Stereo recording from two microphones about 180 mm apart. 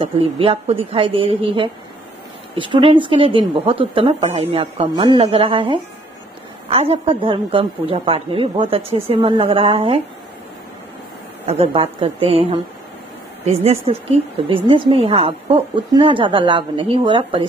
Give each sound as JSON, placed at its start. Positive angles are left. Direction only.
{"t": 0.0, "sound": "a woman's voice", "side_deg": -35}
{"t": 11.4, "sound": "a woman's voice", "side_deg": -35}